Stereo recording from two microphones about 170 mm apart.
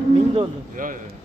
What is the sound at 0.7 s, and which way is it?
Speech, 50° right (ahead or behind).